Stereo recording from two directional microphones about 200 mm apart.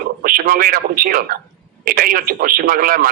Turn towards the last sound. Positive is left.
turn(degrees=-45)  # may be behind; listen again after turning